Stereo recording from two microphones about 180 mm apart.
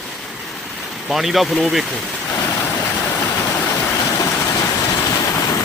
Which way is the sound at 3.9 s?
20° left (ahead or behind).